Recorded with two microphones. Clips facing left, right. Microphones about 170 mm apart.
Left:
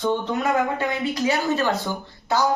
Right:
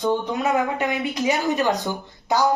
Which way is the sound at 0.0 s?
15° right (ahead or behind).